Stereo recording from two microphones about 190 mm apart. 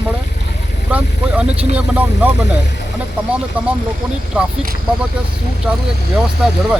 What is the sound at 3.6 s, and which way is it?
Speech, 10° right (ahead or behind).